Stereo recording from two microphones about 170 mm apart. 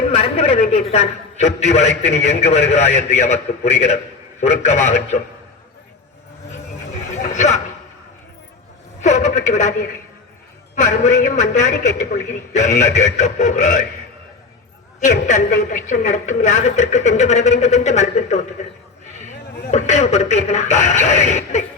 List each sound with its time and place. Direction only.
0.1 s a man's voice: 35° left (ahead or behind)
7.3 s a man's voice: 45° left (ahead or behind)
9.0 s a sound: 45° left (ahead or behind)
10.8 s a woman's voice: 45° left (ahead or behind)
15.0 s a woman's voice: 45° left (ahead or behind)
19.7 s a man's voice: 40° left (ahead or behind)